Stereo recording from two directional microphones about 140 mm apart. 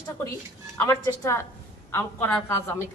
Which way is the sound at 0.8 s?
20° left (ahead or behind).